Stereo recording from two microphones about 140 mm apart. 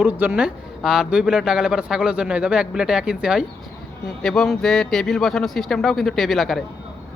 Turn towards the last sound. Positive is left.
turn(degrees=0)  # may be behind; listen again after turning